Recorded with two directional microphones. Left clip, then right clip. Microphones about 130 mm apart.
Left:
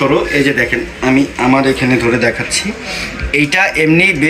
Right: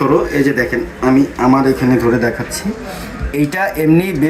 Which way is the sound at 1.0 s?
5° left (ahead or behind).